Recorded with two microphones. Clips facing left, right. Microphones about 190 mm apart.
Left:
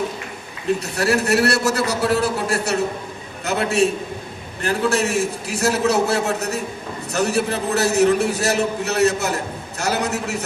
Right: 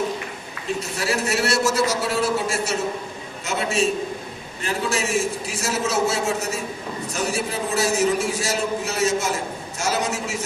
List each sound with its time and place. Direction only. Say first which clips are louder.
0.8 s a man's voice: left 1 dB; 60° left (ahead or behind)